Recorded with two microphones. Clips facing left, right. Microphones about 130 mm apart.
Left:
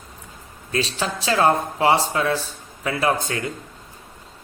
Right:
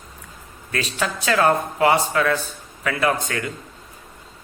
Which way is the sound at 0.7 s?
30° left (ahead or behind).